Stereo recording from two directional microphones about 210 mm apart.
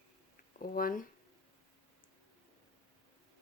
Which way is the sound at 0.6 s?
40° left (ahead or behind).